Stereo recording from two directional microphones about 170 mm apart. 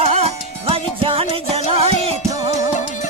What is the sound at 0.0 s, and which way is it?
Music, 40° right (ahead or behind).